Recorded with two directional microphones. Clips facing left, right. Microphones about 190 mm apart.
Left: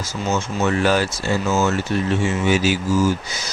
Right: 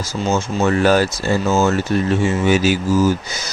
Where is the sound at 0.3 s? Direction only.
35° right (ahead or behind).